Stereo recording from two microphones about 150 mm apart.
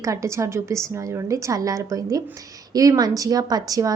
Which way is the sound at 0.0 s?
20° right (ahead or behind).